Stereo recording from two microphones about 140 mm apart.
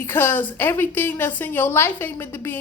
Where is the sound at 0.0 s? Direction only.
15° left (ahead or behind).